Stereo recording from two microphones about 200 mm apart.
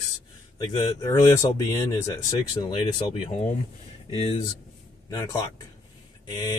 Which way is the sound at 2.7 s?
25° left (ahead or behind).